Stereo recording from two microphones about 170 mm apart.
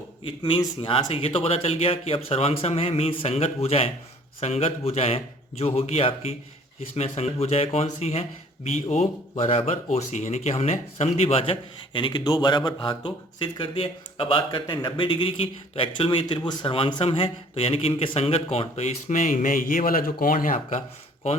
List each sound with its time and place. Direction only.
0.3 s a man's voice: 30° left (ahead or behind); by 20.8 s 50° left (ahead or behind)